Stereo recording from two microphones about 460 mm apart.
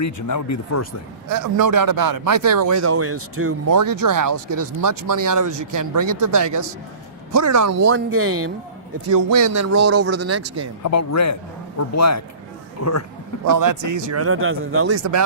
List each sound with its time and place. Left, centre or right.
0.0 s speech: left
1.3 s speech: right
3.7 s a man's voice: right
9.0 s a man's voice: right
10.8 s speech: left
13.6 s a man's voice: right